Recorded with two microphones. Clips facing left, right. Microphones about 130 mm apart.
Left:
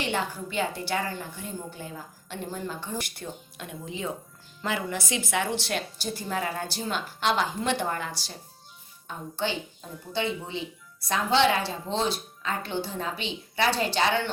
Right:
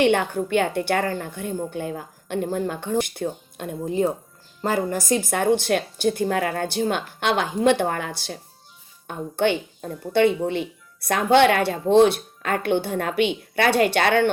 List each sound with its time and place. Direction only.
0.0 s a woman's voice: 60° right (ahead or behind)